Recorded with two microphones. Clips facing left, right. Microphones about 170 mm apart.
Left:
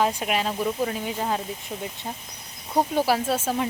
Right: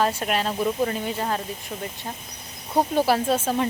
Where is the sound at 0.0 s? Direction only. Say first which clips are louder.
Right 1 dB; 15° left (ahead or behind).